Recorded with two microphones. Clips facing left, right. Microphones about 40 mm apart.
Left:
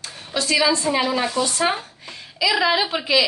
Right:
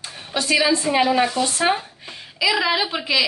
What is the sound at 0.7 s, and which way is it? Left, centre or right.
A woman's voice, centre.